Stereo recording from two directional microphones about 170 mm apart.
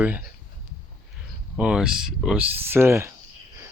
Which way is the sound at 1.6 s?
5° right (ahead or behind).